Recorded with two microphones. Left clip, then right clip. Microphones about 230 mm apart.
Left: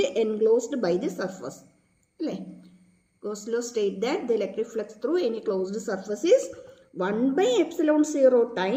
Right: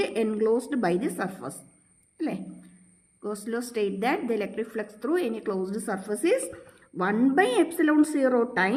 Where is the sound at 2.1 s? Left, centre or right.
Right.